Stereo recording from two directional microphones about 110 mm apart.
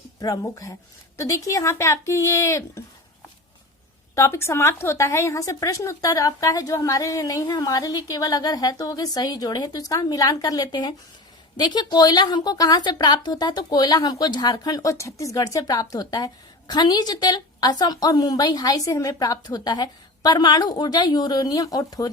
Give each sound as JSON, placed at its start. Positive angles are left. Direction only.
{"t": 0.2, "sound": "a woman's voice", "side_deg": 30}
{"t": 4.1, "sound": "a woman's voice", "side_deg": 25}